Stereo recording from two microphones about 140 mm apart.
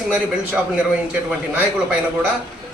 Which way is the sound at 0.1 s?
10° right (ahead or behind).